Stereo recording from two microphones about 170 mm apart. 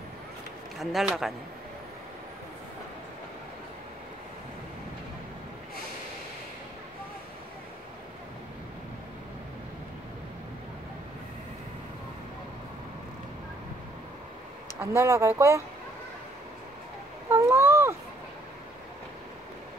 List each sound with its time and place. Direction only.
0.7 s speech: centre (ahead or behind)
14.8 s speech: 15° right (ahead or behind)
17.3 s a sound: 15° right (ahead or behind)